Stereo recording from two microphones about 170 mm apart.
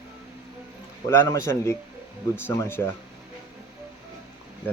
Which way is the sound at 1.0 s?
15° left (ahead or behind).